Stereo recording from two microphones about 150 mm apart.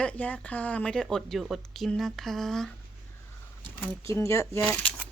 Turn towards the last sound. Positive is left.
turn(degrees=10)  # may be behind; listen again after turning